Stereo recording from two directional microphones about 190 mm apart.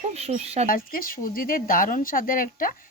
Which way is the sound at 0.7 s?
50° left (ahead or behind).